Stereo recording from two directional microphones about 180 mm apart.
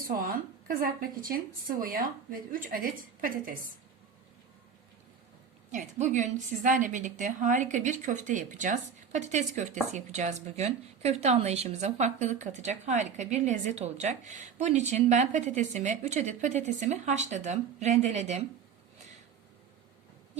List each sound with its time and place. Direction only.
0.1 s a woman's voice: 55° right (ahead or behind)
5.7 s a woman's voice: 45° right (ahead or behind)